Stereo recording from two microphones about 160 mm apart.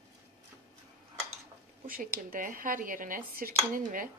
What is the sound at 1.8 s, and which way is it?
A woman's voice, 65° right (ahead or behind).